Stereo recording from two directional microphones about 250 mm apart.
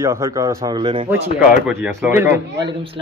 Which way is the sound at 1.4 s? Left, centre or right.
Centre.